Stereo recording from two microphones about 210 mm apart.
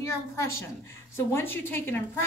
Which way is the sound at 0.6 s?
10° left (ahead or behind).